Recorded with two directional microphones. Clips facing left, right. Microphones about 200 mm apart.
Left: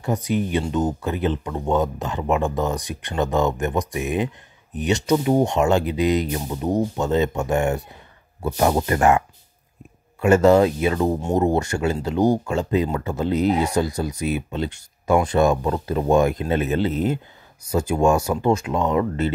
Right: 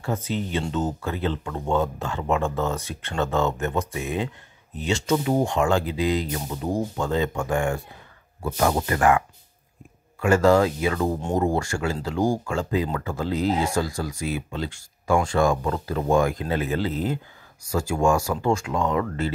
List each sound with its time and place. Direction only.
0.0 s speech: 15° left (ahead or behind)
10.2 s speech: 20° left (ahead or behind)